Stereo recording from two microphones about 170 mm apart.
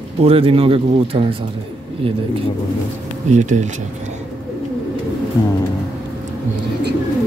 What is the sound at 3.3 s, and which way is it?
Speech, 45° right (ahead or behind).